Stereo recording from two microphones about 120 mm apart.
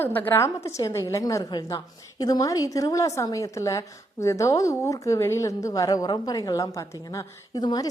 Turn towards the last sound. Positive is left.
turn(degrees=35)  # may be behind; listen again after turning